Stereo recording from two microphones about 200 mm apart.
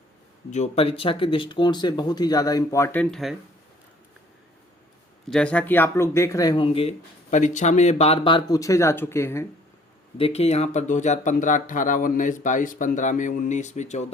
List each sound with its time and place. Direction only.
0.5 s speech: 30° left (ahead or behind); by 3.3 s centre (ahead or behind)
5.3 s speech: 5° left (ahead or behind)
10.2 s speech: 30° left (ahead or behind)